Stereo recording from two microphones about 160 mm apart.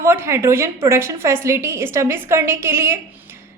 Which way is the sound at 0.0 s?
15° right (ahead or behind).